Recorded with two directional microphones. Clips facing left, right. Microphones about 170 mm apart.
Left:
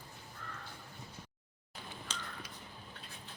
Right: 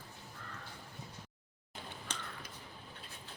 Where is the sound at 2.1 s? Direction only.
55° right (ahead or behind).